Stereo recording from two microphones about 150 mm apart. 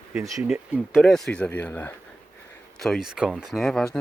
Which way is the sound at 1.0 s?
5° left (ahead or behind).